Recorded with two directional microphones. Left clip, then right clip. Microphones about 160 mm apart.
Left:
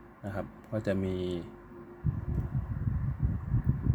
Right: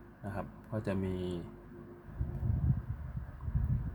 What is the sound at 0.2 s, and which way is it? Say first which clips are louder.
Speech: left 4 dB; 15° left (ahead or behind).